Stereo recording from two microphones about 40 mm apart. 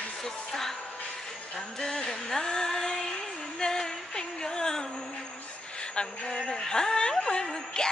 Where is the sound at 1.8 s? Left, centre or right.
Centre.